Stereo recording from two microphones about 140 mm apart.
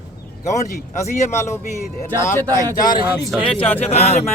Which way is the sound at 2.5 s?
25° right (ahead or behind).